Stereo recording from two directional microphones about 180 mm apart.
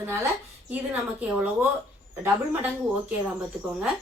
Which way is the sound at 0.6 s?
10° right (ahead or behind).